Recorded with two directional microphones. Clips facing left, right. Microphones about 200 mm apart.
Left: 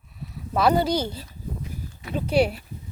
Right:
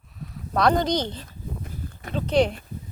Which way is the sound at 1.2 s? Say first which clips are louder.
Left 1 dB; 50° right (ahead or behind).